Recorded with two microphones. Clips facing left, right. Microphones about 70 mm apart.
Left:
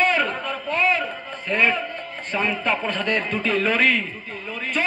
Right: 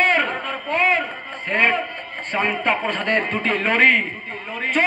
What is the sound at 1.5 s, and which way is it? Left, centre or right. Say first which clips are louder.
A man's voice: right 2 dB; right.